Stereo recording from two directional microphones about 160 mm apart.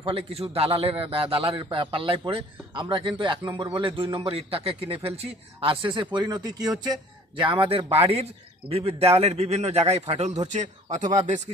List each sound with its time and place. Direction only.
0.0 s a man's voice: 35° right (ahead or behind)